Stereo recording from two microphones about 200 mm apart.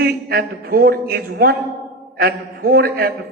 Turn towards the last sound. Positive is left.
turn(degrees=-50)  # may be behind; listen again after turning